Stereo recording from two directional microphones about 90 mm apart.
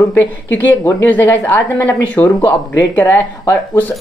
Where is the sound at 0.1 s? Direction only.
20° left (ahead or behind).